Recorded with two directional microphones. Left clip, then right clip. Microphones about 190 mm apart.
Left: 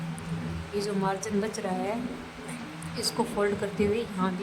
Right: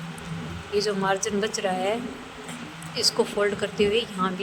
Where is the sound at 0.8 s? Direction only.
10° right (ahead or behind).